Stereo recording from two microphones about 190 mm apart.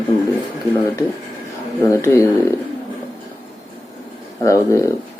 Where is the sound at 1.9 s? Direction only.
15° left (ahead or behind).